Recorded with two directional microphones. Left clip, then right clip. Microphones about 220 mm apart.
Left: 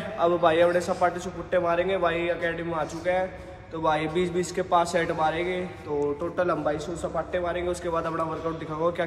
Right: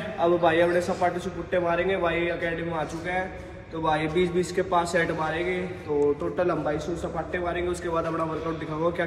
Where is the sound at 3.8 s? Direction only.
25° left (ahead or behind).